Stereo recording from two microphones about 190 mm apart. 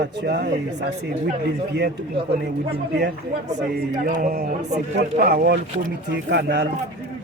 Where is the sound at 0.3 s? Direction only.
60° right (ahead or behind).